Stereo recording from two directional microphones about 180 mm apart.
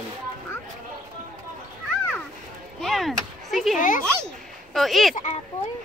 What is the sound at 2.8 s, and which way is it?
Chop, centre (ahead or behind).